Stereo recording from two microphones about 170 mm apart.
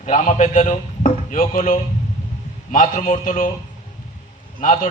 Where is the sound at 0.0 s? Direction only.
45° left (ahead or behind).